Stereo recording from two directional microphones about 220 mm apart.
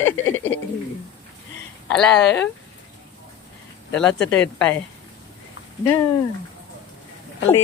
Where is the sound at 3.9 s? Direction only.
5° left (ahead or behind).